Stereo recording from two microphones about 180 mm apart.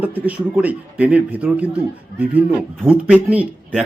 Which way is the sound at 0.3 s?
10° right (ahead or behind).